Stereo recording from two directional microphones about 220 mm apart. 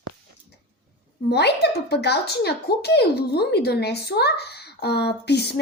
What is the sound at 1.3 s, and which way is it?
Speech, 50° left (ahead or behind).